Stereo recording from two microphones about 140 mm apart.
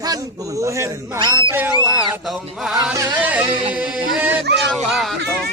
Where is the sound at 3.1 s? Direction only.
10° right (ahead or behind).